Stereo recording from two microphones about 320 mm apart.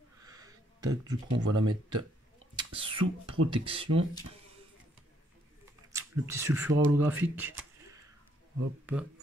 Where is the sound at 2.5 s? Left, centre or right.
Centre.